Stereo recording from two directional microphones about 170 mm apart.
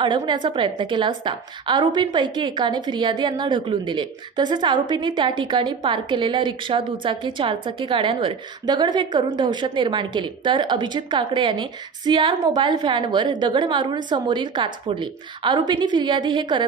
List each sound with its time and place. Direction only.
0.0 s a woman's voice: 25° right (ahead or behind)